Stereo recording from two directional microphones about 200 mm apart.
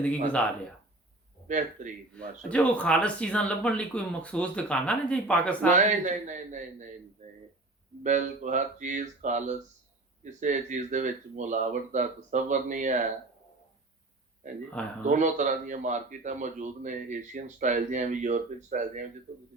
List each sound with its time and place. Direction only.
1.5 s speech: 35° right (ahead or behind)
2.2 s speech: 5° left (ahead or behind)
5.7 s speech: 35° right (ahead or behind)
8.0 s speech: 40° right (ahead or behind)
14.4 s speech: 40° right (ahead or behind)